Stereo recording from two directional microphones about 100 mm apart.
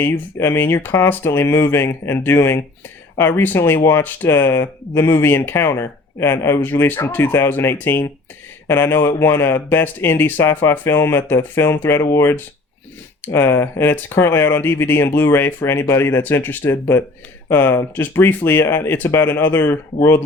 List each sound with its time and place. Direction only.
0.0 s speech: 25° left (ahead or behind)